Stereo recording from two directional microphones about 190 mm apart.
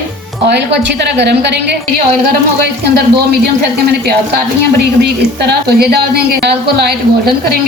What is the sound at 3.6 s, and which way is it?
Speech, 55° right (ahead or behind).